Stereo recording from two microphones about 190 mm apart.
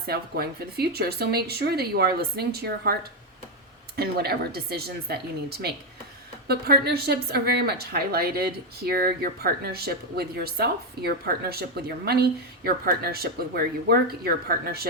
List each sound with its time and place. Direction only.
0.1 s speech: 55° right (ahead or behind)
3.9 s speech: 55° right (ahead or behind)